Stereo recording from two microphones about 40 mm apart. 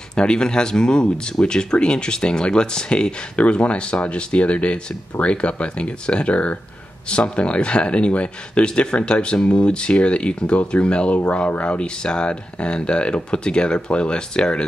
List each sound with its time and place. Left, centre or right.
0.1 s speech: left